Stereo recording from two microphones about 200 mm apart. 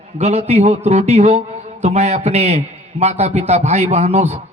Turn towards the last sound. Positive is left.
turn(degrees=-35)  # may be behind; listen again after turning